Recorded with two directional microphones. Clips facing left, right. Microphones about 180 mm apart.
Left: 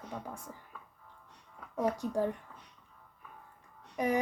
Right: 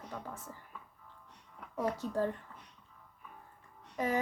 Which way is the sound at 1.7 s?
15° left (ahead or behind).